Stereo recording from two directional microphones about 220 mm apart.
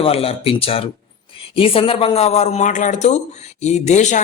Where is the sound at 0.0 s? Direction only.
25° left (ahead or behind).